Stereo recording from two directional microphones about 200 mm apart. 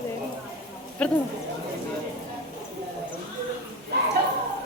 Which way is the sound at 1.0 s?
5° left (ahead or behind).